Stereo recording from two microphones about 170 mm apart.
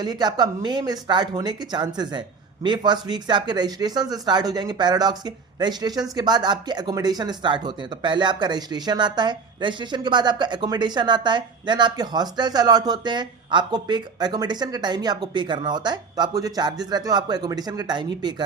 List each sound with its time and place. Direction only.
0.0 s speech: 25° right (ahead or behind)